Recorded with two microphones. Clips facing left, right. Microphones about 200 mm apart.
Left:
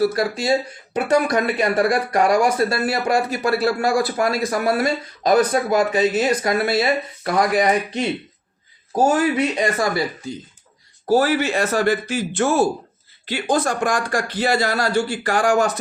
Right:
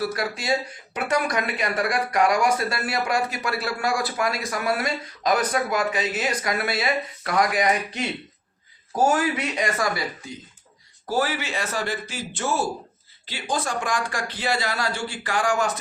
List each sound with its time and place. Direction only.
0.0 s speech: 35° left (ahead or behind)
11.0 s speech: 40° left (ahead or behind)